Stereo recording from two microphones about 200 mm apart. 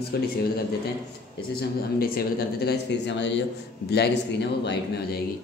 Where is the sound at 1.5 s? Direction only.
50° left (ahead or behind).